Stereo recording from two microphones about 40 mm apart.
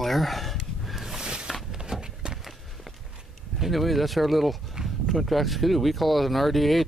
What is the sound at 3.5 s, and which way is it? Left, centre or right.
Speech, centre.